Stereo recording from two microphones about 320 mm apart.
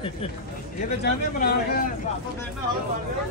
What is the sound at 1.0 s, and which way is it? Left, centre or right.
Speech, left.